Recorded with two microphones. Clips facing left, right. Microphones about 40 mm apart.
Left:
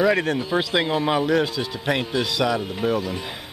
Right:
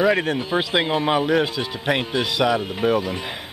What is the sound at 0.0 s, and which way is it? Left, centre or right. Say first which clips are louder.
Speech: right 1 dB; centre.